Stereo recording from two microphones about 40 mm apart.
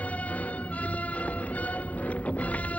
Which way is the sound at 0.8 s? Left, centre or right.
Left.